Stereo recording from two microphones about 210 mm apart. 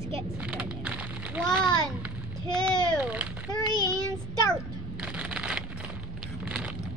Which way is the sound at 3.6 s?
20° left (ahead or behind).